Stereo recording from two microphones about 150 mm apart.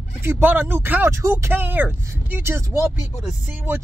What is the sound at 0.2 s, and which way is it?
Speech, 15° right (ahead or behind).